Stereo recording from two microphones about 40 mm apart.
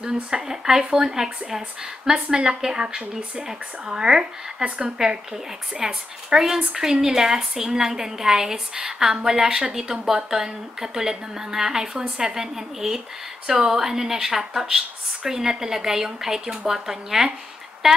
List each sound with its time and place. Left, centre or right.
0.0 s a woman's voice: centre